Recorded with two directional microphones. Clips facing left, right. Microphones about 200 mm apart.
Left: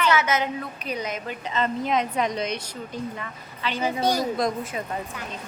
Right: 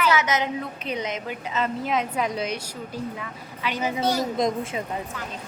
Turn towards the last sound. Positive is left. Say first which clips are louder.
# right 1 dB
turn(degrees=-20)  # may be behind; listen again after turning